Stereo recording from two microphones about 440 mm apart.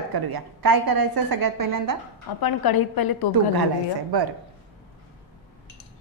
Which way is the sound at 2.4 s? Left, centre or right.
Left.